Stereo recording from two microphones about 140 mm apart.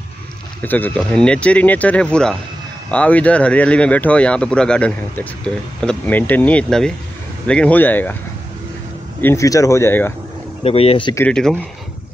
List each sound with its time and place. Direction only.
0.6 s speech: 15° left (ahead or behind)
9.2 s speech: 20° left (ahead or behind)
10.6 s speech: 45° left (ahead or behind)